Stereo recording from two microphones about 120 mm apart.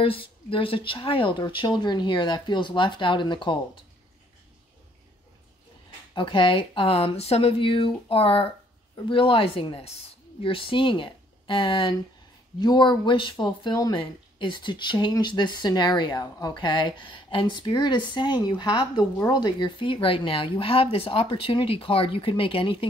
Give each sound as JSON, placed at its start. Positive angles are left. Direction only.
{"t": 0.0, "sound": "speech", "side_deg": 50}
{"t": 6.1, "sound": "a woman's voice", "side_deg": 45}